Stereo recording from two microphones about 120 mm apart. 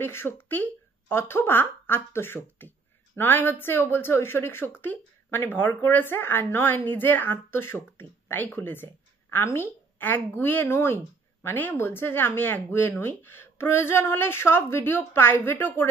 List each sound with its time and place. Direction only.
0.0 s speech: 20° left (ahead or behind)